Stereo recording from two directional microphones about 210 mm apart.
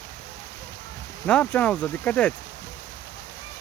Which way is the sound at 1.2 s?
5° left (ahead or behind).